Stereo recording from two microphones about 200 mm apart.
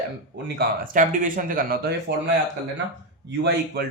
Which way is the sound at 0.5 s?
45° right (ahead or behind).